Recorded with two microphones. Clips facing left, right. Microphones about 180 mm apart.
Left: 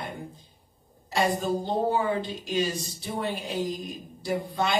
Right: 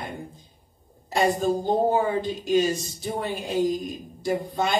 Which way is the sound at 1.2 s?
45° right (ahead or behind).